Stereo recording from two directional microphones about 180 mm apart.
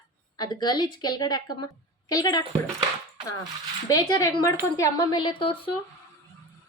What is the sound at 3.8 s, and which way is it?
A woman's voice, 20° left (ahead or behind).